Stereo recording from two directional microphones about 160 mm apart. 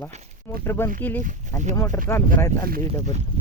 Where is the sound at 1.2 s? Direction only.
50° right (ahead or behind).